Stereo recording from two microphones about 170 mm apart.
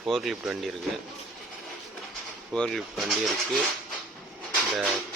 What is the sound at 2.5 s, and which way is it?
Speech, 5° left (ahead or behind).